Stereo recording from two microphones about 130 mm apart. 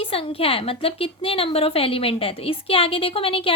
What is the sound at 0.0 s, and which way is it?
A woman's voice, 45° left (ahead or behind).